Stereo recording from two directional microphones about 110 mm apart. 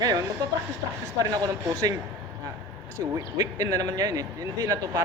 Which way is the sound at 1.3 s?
35° right (ahead or behind).